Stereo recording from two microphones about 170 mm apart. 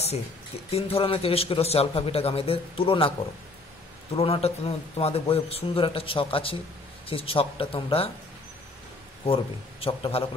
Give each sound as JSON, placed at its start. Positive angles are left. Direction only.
{"t": 0.7, "sound": "a man's voice", "side_deg": 35}
{"t": 4.1, "sound": "a man's voice", "side_deg": 35}
{"t": 9.2, "sound": "a man's voice", "side_deg": 35}